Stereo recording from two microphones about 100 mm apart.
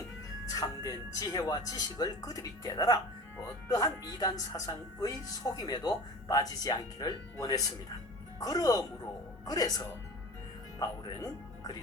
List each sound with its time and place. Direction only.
0.4 s speech: 40° left (ahead or behind)